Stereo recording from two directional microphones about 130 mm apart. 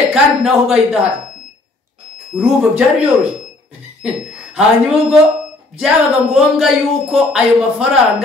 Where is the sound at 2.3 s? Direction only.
5° right (ahead or behind).